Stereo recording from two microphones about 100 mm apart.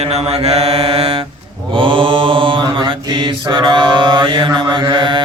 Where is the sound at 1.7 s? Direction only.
60° right (ahead or behind).